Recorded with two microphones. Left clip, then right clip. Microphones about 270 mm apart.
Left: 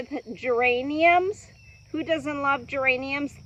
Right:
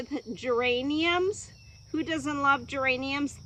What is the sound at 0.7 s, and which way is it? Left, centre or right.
Speech, centre.